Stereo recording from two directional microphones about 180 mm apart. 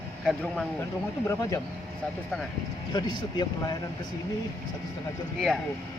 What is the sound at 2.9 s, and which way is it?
Speech, 25° left (ahead or behind).